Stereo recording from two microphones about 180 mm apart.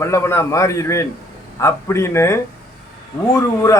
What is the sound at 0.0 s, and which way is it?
Speech, 15° left (ahead or behind).